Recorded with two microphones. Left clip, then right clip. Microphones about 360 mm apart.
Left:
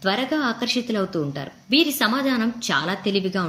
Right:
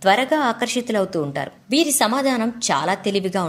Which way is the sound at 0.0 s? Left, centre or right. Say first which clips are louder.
Right 6 dB; centre.